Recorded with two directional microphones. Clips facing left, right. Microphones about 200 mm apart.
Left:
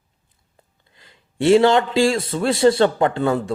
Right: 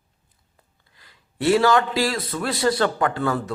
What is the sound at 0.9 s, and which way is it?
A man's voice, 25° left (ahead or behind).